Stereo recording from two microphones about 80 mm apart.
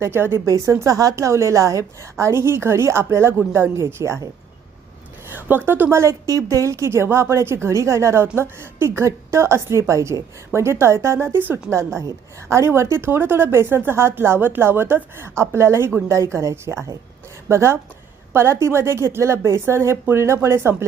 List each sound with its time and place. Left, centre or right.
0.0 s a woman's voice: right
0.4 s a woman's voice: right
5.3 s a woman's voice: right